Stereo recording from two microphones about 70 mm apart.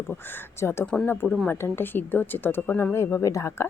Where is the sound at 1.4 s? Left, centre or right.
Left.